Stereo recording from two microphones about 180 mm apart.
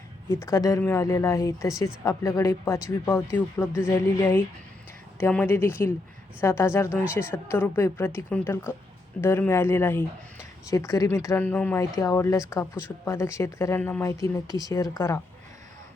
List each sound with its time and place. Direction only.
0.3 s a man's voice: 15° left (ahead or behind)